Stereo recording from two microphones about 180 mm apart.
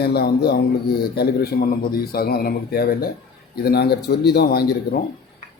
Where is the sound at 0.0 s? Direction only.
60° left (ahead or behind).